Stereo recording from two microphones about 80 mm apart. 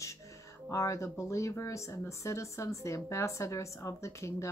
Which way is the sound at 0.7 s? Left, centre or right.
Left.